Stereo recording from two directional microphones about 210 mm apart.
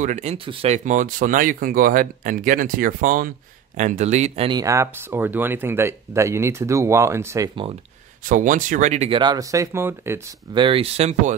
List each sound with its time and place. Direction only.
0.0 s speech: 35° right (ahead or behind)
8.2 s speech: 40° right (ahead or behind)